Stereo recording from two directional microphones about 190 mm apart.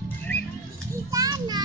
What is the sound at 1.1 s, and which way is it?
Children playing, 20° right (ahead or behind).